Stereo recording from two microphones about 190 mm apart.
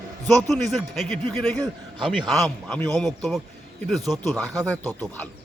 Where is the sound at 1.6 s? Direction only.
25° right (ahead or behind).